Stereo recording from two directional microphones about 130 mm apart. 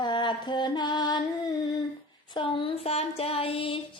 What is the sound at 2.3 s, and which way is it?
Child singing, 40° left (ahead or behind).